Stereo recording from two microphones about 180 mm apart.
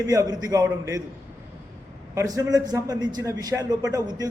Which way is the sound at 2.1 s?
20° right (ahead or behind).